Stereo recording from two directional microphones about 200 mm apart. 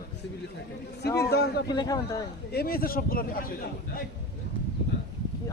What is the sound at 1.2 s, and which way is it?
Speech, 55° left (ahead or behind).